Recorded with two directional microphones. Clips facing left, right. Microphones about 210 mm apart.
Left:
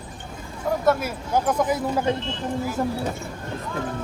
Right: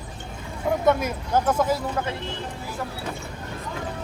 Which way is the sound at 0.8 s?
5° left (ahead or behind).